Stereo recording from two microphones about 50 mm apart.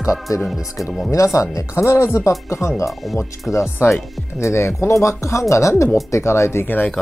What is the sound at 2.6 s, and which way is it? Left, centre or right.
Speech, left.